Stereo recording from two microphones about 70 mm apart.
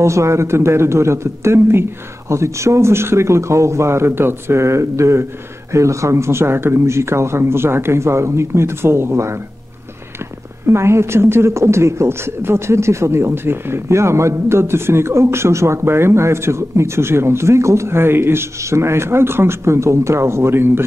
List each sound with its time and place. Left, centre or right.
0.0 s a woman's voice: right
10.7 s a woman's voice: right